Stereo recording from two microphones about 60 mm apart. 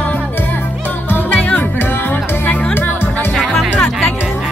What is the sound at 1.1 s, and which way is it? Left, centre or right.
Music, left.